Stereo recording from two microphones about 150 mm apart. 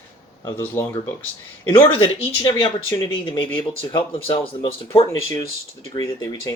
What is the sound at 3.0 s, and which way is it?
Speech, 30° left (ahead or behind).